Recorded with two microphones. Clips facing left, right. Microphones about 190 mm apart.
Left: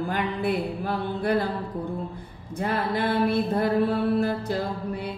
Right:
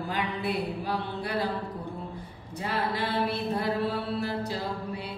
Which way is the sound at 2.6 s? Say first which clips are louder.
Left 4 dB; 50° left (ahead or behind).